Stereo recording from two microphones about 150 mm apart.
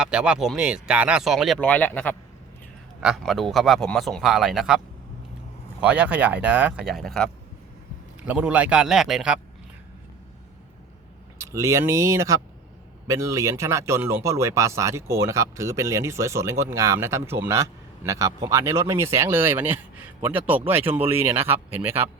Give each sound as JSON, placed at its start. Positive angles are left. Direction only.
{"t": 0.0, "sound": "a man's voice", "side_deg": -5}
{"t": 1.5, "sound": "speech", "side_deg": 10}
{"t": 3.0, "sound": "a man's voice", "side_deg": 0}
{"t": 5.8, "sound": "speech", "side_deg": -10}
{"t": 8.3, "sound": "speech", "side_deg": -10}
{"t": 11.3, "sound": "speech", "side_deg": -20}